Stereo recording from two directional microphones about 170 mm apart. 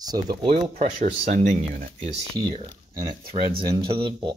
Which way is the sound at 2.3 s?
25° right (ahead or behind).